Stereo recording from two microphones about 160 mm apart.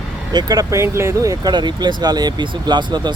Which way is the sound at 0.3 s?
25° right (ahead or behind).